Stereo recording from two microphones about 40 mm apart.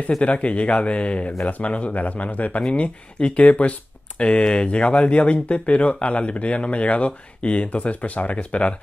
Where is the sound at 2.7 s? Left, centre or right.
Left.